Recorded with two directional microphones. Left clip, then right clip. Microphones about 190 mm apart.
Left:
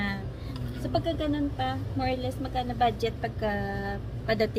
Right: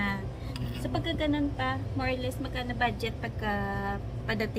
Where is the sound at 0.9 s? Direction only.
5° left (ahead or behind).